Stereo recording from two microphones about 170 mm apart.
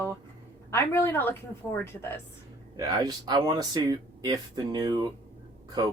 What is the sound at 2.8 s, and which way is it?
Speech, 25° right (ahead or behind).